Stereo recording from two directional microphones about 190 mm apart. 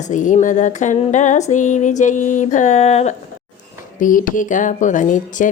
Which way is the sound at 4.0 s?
45° left (ahead or behind).